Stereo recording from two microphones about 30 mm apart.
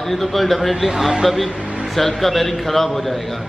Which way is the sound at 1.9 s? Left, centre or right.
Centre.